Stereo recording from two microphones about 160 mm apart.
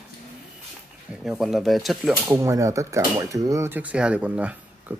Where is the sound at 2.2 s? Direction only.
20° right (ahead or behind).